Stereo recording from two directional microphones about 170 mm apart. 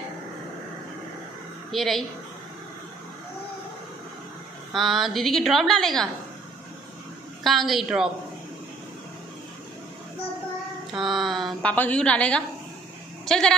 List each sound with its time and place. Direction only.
1.7 s a woman's voice: centre (ahead or behind)
4.7 s a woman's voice: centre (ahead or behind)
7.4 s a woman's voice: centre (ahead or behind)
10.9 s a woman's voice: centre (ahead or behind)
13.2 s bleat: 5° left (ahead or behind)